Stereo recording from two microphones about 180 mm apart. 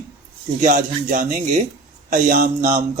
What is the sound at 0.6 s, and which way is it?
Speech, 45° right (ahead or behind).